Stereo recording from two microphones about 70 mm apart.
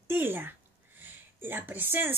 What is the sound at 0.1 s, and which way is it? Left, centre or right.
Speech, right.